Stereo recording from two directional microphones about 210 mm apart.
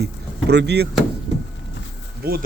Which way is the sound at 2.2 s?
45° right (ahead or behind).